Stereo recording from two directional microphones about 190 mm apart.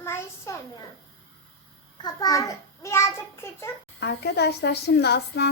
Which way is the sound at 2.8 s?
15° left (ahead or behind).